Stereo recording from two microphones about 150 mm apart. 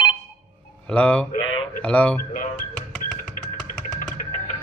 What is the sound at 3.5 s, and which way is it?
Music, 60° left (ahead or behind).